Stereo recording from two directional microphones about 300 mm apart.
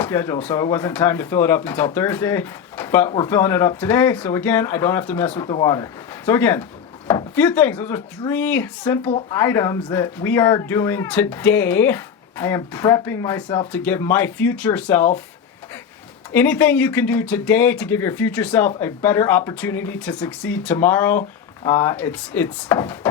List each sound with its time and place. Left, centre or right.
0.0 s speech: centre
16.3 s speech: centre